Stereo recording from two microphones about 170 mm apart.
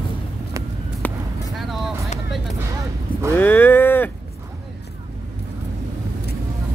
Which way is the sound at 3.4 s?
10° left (ahead or behind).